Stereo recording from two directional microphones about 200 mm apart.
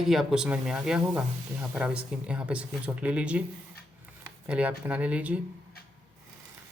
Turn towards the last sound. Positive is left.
turn(degrees=-5)  # may be behind; listen again after turning